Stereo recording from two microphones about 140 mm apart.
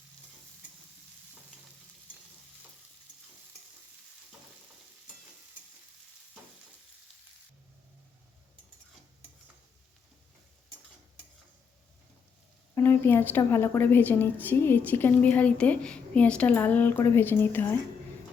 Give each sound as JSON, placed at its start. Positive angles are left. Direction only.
{"t": 12.7, "sound": "a woman's voice", "side_deg": 15}